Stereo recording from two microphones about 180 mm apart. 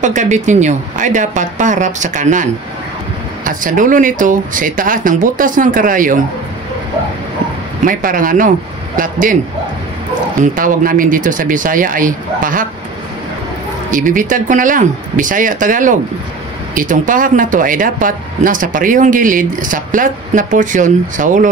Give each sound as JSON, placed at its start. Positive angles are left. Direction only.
{"t": 0.0, "sound": "speech", "side_deg": -40}
{"t": 3.4, "sound": "speech", "side_deg": -45}
{"t": 7.8, "sound": "speech", "side_deg": -50}
{"t": 10.4, "sound": "speech", "side_deg": -50}
{"t": 13.8, "sound": "speech", "side_deg": -50}